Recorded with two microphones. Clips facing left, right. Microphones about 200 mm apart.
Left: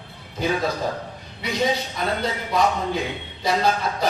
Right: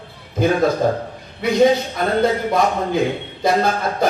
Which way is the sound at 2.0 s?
50° right (ahead or behind).